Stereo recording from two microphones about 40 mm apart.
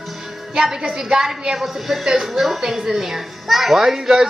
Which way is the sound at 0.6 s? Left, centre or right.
Centre.